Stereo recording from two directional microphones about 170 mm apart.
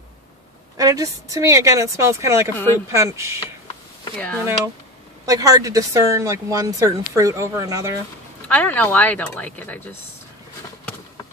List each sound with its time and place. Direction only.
0.7 s a woman's voice: 20° right (ahead or behind)
5.2 s a woman's voice: 20° right (ahead or behind)
8.5 s speech: 10° left (ahead or behind)